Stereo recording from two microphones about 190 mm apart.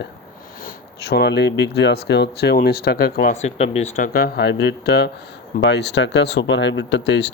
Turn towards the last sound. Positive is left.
turn(degrees=65)  # may be behind; listen again after turning